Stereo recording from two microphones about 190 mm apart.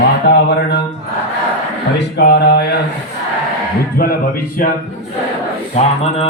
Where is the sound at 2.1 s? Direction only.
60° left (ahead or behind).